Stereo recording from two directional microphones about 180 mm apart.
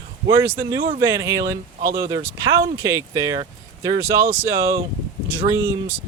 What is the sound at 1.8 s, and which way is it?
Speech, 50° right (ahead or behind).